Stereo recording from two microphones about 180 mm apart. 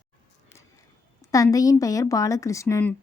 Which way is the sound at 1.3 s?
20° left (ahead or behind).